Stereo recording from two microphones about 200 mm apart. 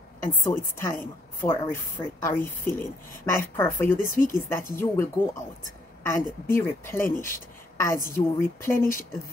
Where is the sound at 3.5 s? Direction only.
15° left (ahead or behind).